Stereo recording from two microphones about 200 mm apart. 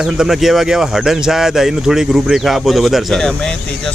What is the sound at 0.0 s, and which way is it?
Speech, 5° right (ahead or behind).